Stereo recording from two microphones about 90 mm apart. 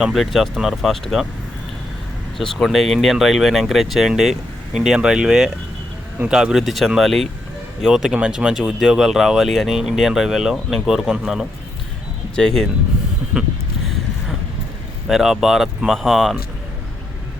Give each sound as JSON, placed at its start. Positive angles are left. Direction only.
{"t": 0.0, "sound": "speech", "side_deg": 0}
{"t": 2.4, "sound": "speech", "side_deg": 5}
{"t": 12.4, "sound": "speech", "side_deg": 5}
{"t": 13.3, "sound": "speech", "side_deg": -20}
{"t": 15.0, "sound": "speech", "side_deg": -5}